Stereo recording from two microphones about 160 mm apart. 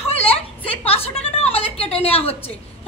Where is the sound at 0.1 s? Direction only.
40° left (ahead or behind).